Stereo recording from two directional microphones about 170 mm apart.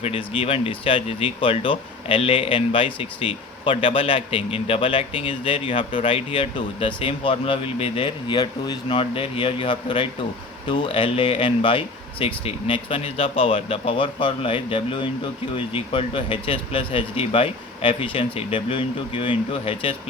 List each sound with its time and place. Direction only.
0.0 s speech: 35° left (ahead or behind)